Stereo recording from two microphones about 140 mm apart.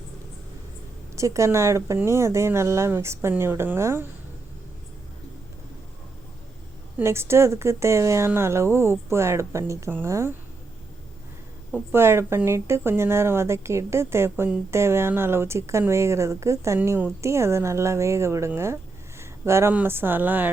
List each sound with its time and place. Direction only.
1.1 s speech: 20° right (ahead or behind)
7.0 s speech: 20° right (ahead or behind)
11.7 s speech: 15° right (ahead or behind)